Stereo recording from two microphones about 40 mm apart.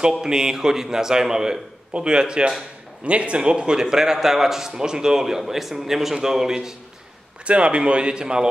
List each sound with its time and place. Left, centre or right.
0.2 s a man's voice: centre
7.4 s a man's voice: right